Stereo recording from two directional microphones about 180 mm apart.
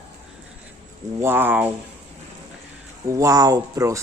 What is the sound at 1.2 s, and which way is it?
Speech, 10° right (ahead or behind).